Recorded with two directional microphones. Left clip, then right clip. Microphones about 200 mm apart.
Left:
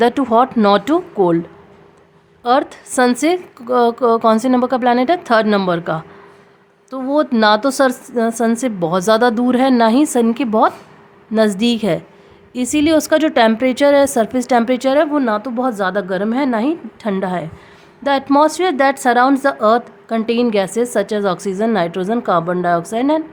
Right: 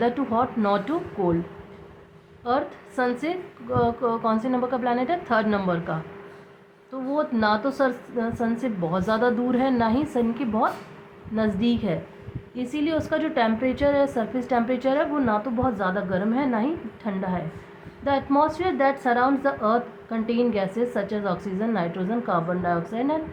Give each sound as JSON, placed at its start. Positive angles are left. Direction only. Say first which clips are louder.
{"t": 0.0, "sound": "a woman's voice", "louder": "left 10 dB", "side_deg": 75}
{"t": 2.4, "sound": "a woman's voice", "louder": "left 10 dB", "side_deg": 70}